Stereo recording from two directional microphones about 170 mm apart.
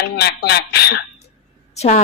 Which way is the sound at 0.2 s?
70° left (ahead or behind).